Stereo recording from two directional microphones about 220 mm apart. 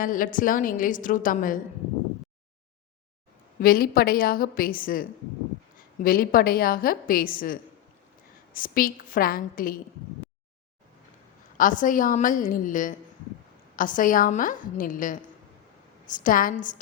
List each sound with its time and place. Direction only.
0.0 s a woman's voice: 40° left (ahead or behind)
3.6 s a woman's voice: 40° left (ahead or behind)
11.5 s a woman's voice: 35° left (ahead or behind)